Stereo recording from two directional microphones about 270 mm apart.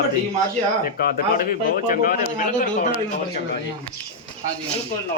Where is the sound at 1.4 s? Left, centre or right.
Left.